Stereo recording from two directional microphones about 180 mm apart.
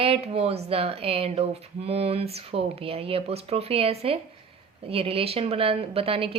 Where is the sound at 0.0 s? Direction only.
35° right (ahead or behind).